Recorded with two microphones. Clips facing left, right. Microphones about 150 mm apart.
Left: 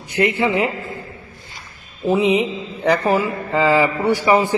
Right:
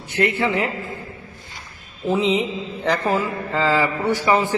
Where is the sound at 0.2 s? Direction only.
15° left (ahead or behind).